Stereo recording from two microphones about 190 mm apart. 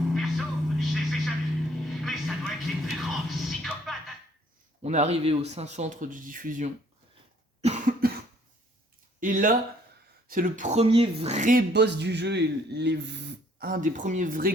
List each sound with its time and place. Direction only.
0.1 s hum: centre (ahead or behind)
1.9 s a sound: centre (ahead or behind)
4.8 s speech: 35° right (ahead or behind)
7.6 s cough: 40° right (ahead or behind)
9.2 s speech: 45° right (ahead or behind)
11.7 s speech: 65° right (ahead or behind); by 14.5 s 45° right (ahead or behind)